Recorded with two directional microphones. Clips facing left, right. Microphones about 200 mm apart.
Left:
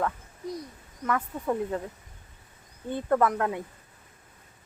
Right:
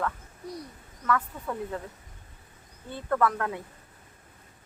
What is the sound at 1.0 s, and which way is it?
Speech, 20° left (ahead or behind).